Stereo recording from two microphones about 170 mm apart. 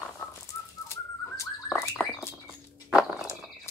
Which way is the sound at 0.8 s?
15° left (ahead or behind).